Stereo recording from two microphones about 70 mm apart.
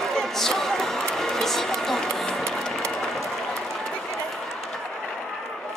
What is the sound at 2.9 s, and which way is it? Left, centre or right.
Applause, centre.